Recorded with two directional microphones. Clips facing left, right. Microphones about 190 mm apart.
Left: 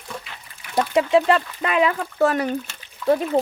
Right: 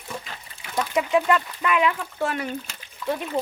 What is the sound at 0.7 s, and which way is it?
Speech, 35° left (ahead or behind).